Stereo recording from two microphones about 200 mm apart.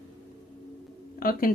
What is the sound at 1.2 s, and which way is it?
Speech, 45° left (ahead or behind).